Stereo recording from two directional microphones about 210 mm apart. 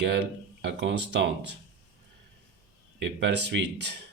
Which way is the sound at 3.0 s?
55° right (ahead or behind).